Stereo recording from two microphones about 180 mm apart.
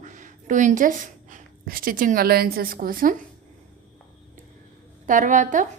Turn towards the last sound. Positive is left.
turn(degrees=-45)  # may be behind; listen again after turning